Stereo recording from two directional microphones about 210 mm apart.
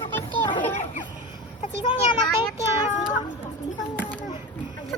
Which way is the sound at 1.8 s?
20° left (ahead or behind).